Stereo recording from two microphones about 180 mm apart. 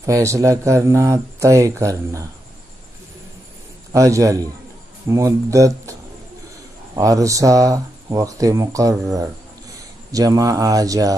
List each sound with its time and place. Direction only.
0.0 s speech: 15° right (ahead or behind)
3.9 s speech: 20° right (ahead or behind)
7.0 s speech: 20° right (ahead or behind)
10.1 s speech: 20° right (ahead or behind)